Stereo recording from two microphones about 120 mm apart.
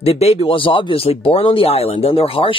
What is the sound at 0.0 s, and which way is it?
Speech, 60° left (ahead or behind).